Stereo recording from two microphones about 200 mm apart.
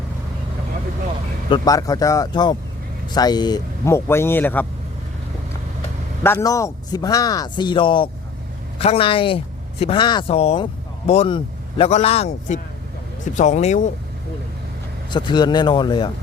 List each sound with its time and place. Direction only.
1.5 s speech: 20° left (ahead or behind)
6.2 s speech: 15° left (ahead or behind); by 13.9 s 35° left (ahead or behind)
15.1 s speech: 20° left (ahead or behind)